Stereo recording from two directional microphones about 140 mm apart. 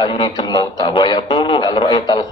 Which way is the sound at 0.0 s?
35° left (ahead or behind).